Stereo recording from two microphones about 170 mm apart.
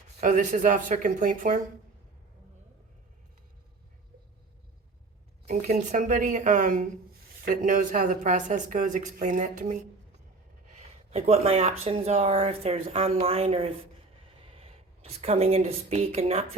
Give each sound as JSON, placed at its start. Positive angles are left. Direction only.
{"t": 0.2, "sound": "speech", "side_deg": -50}
{"t": 5.5, "sound": "speech", "side_deg": -45}
{"t": 10.8, "sound": "speech", "side_deg": -40}